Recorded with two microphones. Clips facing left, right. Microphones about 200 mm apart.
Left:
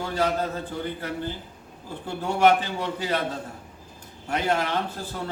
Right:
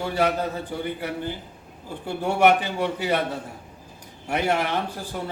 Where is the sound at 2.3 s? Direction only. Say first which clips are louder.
Right 1 dB; 65° right (ahead or behind).